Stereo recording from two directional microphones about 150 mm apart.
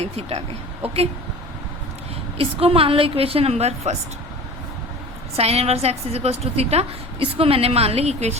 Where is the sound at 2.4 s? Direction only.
40° right (ahead or behind).